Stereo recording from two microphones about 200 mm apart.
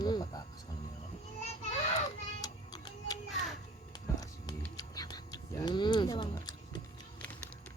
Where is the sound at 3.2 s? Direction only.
Centre (ahead or behind).